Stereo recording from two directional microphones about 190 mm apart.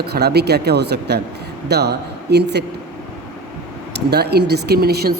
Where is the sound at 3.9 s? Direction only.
60° right (ahead or behind).